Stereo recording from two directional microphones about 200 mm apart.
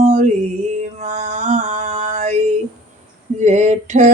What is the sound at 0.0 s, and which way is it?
Music, 35° right (ahead or behind).